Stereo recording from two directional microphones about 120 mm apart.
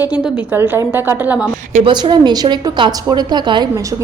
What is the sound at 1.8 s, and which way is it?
A woman's voice, 40° right (ahead or behind).